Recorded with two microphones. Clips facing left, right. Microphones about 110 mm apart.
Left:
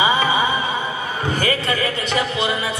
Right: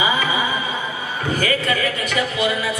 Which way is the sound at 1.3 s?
30° left (ahead or behind).